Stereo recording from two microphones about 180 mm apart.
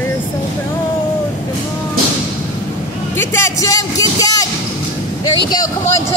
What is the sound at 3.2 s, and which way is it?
Speech, 20° left (ahead or behind).